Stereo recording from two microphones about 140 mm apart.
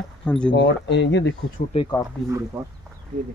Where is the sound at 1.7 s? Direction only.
40° left (ahead or behind).